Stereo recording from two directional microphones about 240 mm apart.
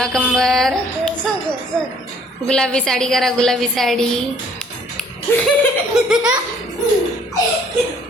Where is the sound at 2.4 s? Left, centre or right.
Centre.